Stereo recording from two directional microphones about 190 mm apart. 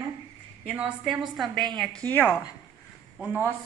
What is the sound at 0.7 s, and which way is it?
A woman's voice, 5° right (ahead or behind).